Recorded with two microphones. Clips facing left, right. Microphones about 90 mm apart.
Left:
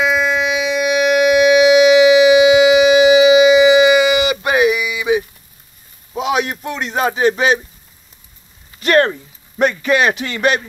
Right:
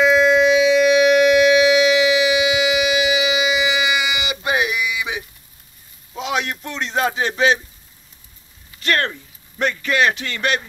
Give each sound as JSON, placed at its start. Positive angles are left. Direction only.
{"t": 0.0, "sound": "civil defense siren", "side_deg": 5}
{"t": 4.5, "sound": "mantra", "side_deg": 45}
{"t": 4.7, "sound": "a sound", "side_deg": 5}
{"t": 6.1, "sound": "a man's voice", "side_deg": 10}
{"t": 8.7, "sound": "speech", "side_deg": 20}